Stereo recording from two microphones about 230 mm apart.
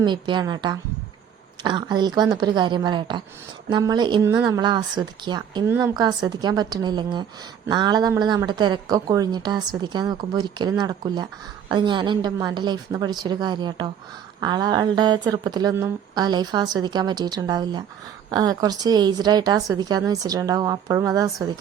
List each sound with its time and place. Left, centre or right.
0.0 s a woman's voice: centre